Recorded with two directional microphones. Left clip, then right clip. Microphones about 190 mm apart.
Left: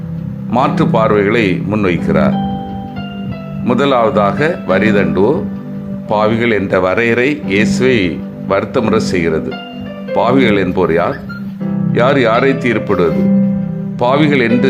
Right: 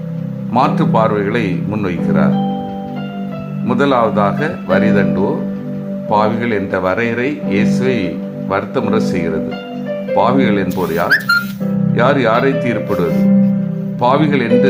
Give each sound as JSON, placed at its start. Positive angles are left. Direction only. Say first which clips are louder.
{"t": 0.5, "sound": "speech", "louder": "left 1 dB", "side_deg": 20}
{"t": 3.7, "sound": "speech", "louder": "left 2 dB", "side_deg": 20}